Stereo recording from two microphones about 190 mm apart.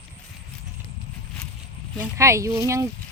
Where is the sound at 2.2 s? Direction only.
15° right (ahead or behind).